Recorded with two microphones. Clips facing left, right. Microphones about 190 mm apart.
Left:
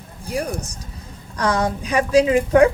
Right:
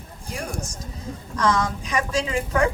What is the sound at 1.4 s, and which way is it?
Speech, 35° left (ahead or behind).